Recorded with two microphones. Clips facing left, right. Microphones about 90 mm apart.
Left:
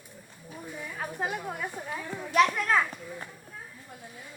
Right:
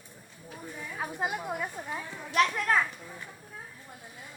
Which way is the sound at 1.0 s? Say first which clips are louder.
Even; 15° right (ahead or behind).